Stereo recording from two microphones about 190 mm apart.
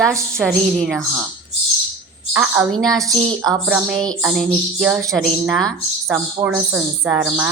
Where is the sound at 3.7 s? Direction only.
Centre (ahead or behind).